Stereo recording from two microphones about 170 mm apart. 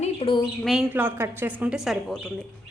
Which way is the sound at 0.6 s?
Centre (ahead or behind).